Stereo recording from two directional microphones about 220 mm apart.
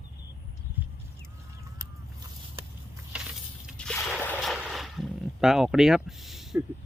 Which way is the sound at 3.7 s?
5° left (ahead or behind).